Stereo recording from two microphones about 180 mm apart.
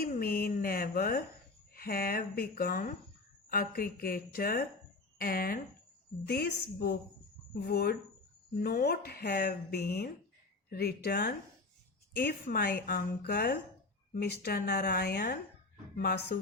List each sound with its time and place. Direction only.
0.0 s a woman's voice: 55° left (ahead or behind)
12.5 s a woman's voice: 60° left (ahead or behind)